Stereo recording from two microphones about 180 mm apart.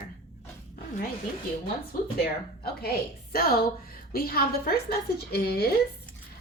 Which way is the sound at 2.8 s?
60° left (ahead or behind).